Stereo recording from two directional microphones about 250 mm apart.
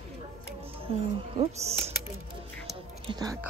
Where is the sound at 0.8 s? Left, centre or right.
Right.